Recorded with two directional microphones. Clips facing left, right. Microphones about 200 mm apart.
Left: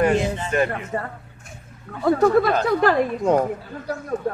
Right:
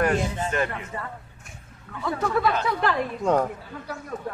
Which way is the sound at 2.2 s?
40° left (ahead or behind).